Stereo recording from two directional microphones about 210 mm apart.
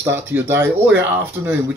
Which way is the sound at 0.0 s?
10° right (ahead or behind).